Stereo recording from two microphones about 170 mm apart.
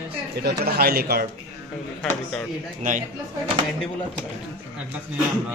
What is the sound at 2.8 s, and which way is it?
Speech, 50° right (ahead or behind).